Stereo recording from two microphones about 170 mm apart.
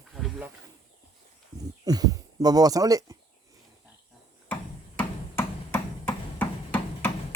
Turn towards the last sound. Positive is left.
turn(degrees=10)  # may be behind; listen again after turning